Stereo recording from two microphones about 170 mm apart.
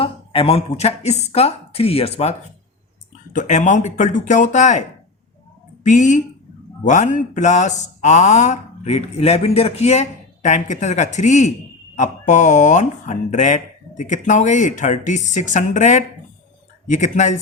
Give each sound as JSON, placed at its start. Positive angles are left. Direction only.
{"t": 0.0, "sound": "speech", "side_deg": 35}
{"t": 3.3, "sound": "speech", "side_deg": 45}
{"t": 5.8, "sound": "speech", "side_deg": 45}